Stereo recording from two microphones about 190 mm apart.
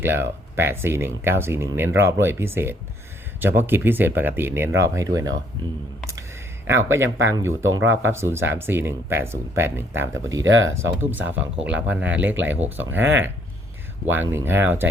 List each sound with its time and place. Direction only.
0.0 s speech: 10° right (ahead or behind)
7.6 s speech: 90° right
8.1 s speech: 15° right (ahead or behind)
10.4 s speech: 90° right
11.0 s speech: 10° right (ahead or behind)
14.1 s speech: 10° right (ahead or behind)